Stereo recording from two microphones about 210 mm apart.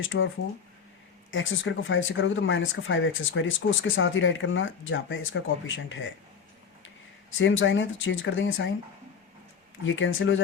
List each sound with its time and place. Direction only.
0.0 s speech: 65° left (ahead or behind)
1.3 s speech: 65° left (ahead or behind)
7.3 s speech: 65° left (ahead or behind)
9.8 s speech: 65° left (ahead or behind)